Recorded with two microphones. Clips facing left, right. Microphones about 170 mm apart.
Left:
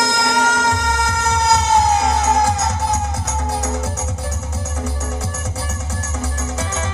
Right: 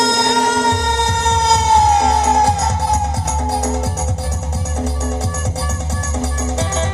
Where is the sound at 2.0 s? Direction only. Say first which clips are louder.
Right 2 dB; 35° right (ahead or behind).